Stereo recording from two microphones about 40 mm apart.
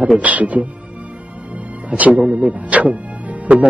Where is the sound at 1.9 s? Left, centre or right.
Right.